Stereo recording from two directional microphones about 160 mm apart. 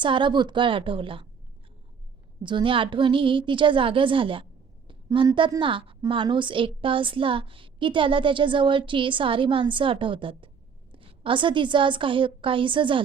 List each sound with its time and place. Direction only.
0.0 s a woman's voice: 30° right (ahead or behind)
2.4 s a woman's voice: 30° right (ahead or behind)